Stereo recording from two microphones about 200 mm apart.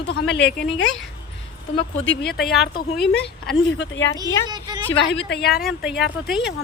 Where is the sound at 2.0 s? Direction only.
65° left (ahead or behind).